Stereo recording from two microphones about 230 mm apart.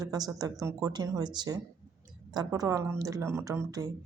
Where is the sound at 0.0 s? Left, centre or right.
Centre.